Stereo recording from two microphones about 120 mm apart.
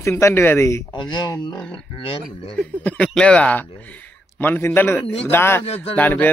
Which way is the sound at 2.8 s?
5° left (ahead or behind).